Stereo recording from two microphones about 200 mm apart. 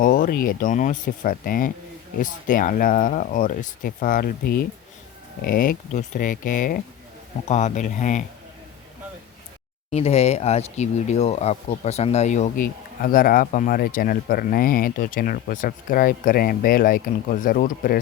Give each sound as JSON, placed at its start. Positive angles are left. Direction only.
{"t": 0.0, "sound": "speech", "side_deg": 40}
{"t": 9.9, "sound": "speech", "side_deg": 30}
{"t": 13.0, "sound": "speech", "side_deg": 45}